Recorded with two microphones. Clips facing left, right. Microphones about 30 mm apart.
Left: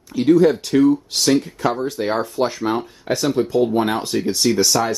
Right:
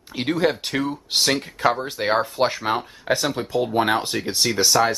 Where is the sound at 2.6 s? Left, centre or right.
Right.